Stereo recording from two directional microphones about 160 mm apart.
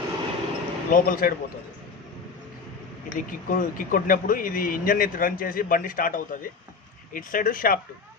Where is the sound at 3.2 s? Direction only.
60° left (ahead or behind).